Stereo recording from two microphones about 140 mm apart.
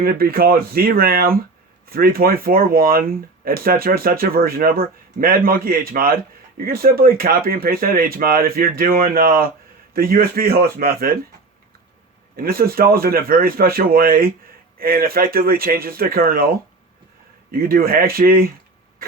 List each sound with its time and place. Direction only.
0.0 s speech: 90° right
12.4 s speech: 90° right
17.5 s speech: 90° right